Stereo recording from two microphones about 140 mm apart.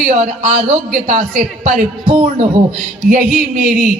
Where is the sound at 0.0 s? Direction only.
70° right (ahead or behind).